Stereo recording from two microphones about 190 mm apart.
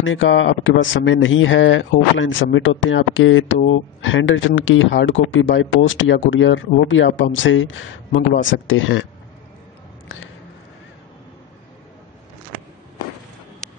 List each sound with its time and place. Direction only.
0.0 s speech: 90° left